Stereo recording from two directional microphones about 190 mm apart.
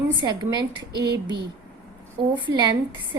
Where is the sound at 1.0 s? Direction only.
60° right (ahead or behind).